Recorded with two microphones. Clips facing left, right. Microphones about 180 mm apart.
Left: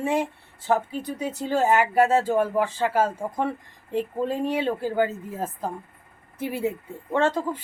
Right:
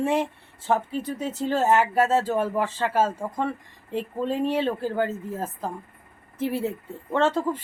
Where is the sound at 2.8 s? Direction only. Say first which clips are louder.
Even; centre (ahead or behind).